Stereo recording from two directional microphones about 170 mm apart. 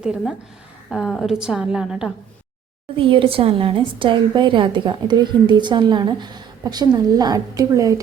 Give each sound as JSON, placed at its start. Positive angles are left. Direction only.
{"t": 0.0, "sound": "a woman's voice", "side_deg": -5}
{"t": 3.0, "sound": "a woman's voice", "side_deg": -30}